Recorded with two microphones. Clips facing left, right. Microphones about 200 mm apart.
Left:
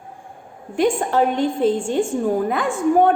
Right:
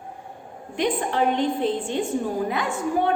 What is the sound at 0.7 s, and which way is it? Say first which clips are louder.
A woman's voice: left 5 dB; 45° left (ahead or behind).